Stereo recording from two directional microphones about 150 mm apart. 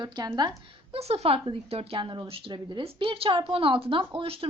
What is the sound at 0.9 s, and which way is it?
Speech, 45° right (ahead or behind).